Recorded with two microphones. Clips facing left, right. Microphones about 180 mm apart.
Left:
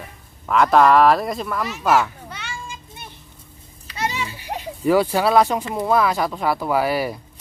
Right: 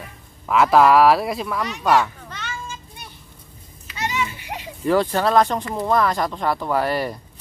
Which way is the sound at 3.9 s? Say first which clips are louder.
Even; 35° left (ahead or behind).